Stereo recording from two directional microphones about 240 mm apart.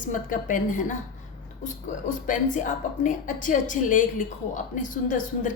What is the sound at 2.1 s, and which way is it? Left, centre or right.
A woman's voice, left.